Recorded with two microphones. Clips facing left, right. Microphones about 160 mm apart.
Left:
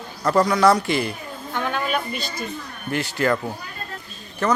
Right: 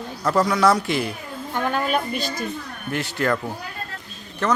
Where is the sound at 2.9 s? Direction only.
Centre (ahead or behind).